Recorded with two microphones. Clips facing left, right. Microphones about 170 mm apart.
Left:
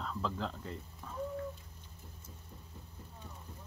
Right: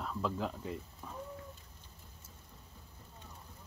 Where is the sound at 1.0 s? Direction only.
10° right (ahead or behind).